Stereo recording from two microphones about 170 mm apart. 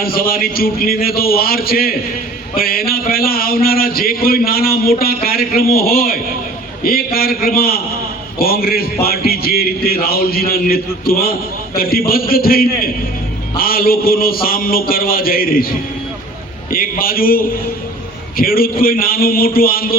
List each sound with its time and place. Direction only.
0.0 s speech: 60° left (ahead or behind)
16.7 s speech: 60° left (ahead or behind)